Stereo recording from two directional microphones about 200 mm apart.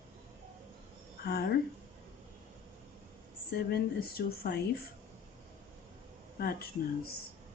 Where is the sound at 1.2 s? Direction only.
50° left (ahead or behind).